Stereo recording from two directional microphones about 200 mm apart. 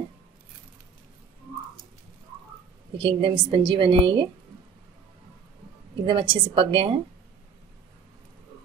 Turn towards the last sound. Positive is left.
turn(degrees=-25)  # may be behind; listen again after turning